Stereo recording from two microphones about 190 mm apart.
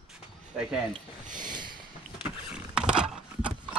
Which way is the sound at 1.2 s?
45° right (ahead or behind).